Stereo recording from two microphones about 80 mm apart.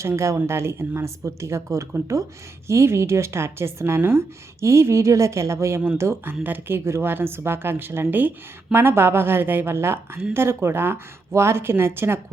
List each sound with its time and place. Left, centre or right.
0.0 s a woman's voice: right